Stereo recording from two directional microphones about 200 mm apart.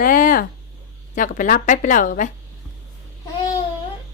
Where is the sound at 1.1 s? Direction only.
40° left (ahead or behind).